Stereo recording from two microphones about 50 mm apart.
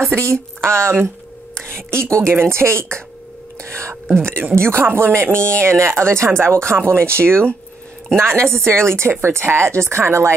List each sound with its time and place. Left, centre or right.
0.1 s speech: right
5.3 s speech: left
5.6 s speech: right